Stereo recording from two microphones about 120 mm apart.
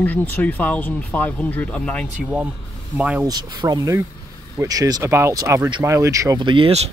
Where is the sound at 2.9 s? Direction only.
10° right (ahead or behind).